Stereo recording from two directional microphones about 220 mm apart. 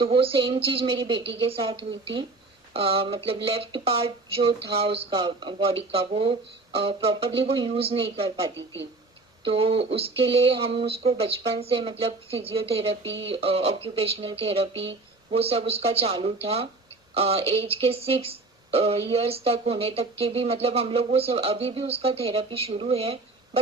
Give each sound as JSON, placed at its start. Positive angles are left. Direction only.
{"t": 0.0, "sound": "speech", "side_deg": -25}